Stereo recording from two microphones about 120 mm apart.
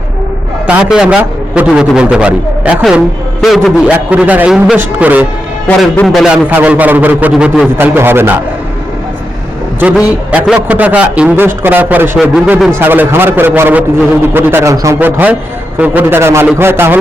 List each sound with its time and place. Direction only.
0.7 s a man's voice: 5° right (ahead or behind)
3.9 s a man's voice: 15° right (ahead or behind)
10.3 s a man's voice: 10° right (ahead or behind)
12.3 s a man's voice: 5° right (ahead or behind)
12.8 s a man's voice: 15° right (ahead or behind)
14.9 s a man's voice: 15° right (ahead or behind)